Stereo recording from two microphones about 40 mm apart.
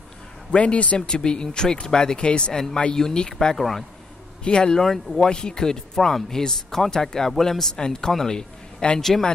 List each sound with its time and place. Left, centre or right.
0.5 s speech: left
2.5 s speech: centre
4.7 s speech: centre
5.3 s speech: left